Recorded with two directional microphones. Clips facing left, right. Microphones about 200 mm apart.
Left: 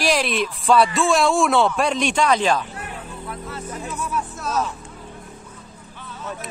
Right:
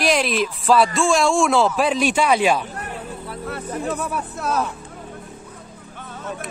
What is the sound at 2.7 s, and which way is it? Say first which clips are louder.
Music: right 3 dB; 40° right (ahead or behind).